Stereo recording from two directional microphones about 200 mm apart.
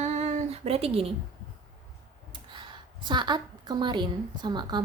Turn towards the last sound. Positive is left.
turn(degrees=-20)  # may be behind; listen again after turning